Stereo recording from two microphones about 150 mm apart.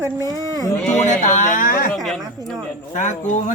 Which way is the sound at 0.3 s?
25° right (ahead or behind).